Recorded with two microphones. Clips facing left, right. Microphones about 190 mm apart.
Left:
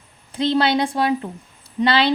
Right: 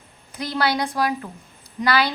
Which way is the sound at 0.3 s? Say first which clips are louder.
Left 5 dB; 25° left (ahead or behind).